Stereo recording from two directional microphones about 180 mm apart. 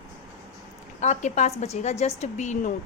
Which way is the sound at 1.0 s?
40° left (ahead or behind).